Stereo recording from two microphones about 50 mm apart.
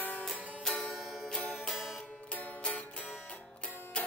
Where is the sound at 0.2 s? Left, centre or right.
Centre.